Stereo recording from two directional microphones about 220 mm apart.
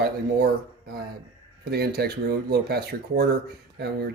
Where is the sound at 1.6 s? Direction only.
45° right (ahead or behind).